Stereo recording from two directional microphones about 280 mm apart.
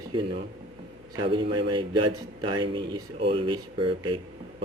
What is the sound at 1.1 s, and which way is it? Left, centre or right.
A man's voice, centre.